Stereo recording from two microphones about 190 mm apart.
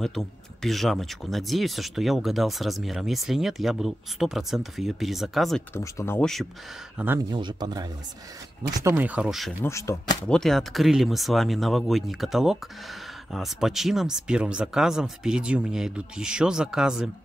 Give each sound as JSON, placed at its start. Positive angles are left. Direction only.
{"t": 0.0, "sound": "speech", "side_deg": 0}
{"t": 5.8, "sound": "speech", "side_deg": 15}
{"t": 7.2, "sound": "speech", "side_deg": -25}
{"t": 8.8, "sound": "speech", "side_deg": -10}
{"t": 9.6, "sound": "speech", "side_deg": 15}
{"t": 10.3, "sound": "speech", "side_deg": 0}